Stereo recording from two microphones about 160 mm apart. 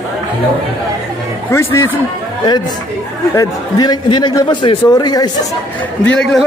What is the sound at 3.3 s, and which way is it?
A man's voice, 25° left (ahead or behind).